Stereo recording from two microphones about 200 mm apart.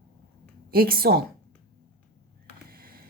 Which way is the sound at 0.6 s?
50° right (ahead or behind).